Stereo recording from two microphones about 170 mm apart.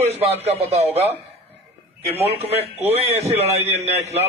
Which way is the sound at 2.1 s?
35° right (ahead or behind).